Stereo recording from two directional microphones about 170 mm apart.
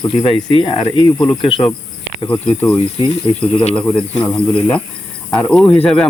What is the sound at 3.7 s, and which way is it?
Speech, 5° left (ahead or behind).